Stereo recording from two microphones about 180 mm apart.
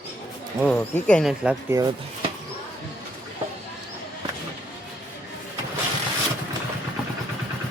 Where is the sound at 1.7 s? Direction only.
15° right (ahead or behind).